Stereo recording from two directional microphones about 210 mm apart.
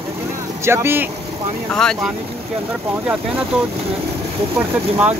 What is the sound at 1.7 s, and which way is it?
Speech, 5° left (ahead or behind).